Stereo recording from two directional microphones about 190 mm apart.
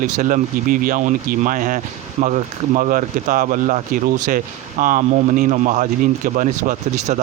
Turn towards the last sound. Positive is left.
turn(degrees=-40)  # may be behind; listen again after turning